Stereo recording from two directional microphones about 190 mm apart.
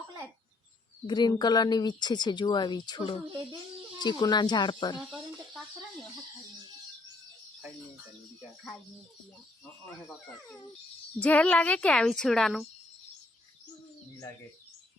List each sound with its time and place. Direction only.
1.0 s speech: 20° left (ahead or behind)
11.2 s a woman's voice: 10° left (ahead or behind)